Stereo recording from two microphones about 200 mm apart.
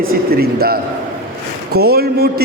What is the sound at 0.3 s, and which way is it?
A man's voice, 50° right (ahead or behind).